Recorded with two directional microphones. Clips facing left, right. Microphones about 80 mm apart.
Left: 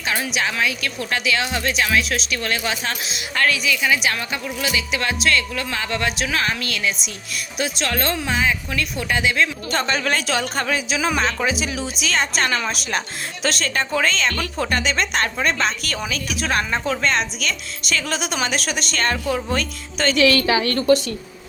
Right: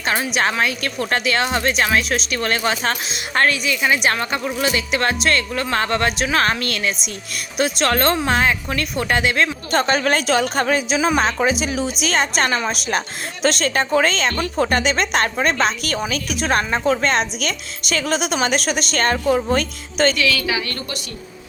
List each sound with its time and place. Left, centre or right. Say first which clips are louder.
0.6 s a woman's voice: right 2 dB; right
20.3 s a woman's voice: left 4 dB; left